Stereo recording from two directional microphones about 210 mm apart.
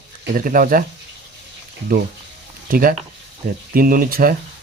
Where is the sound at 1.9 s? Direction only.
45° right (ahead or behind).